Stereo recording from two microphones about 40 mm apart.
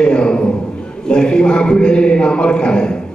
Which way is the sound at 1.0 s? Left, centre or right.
Centre.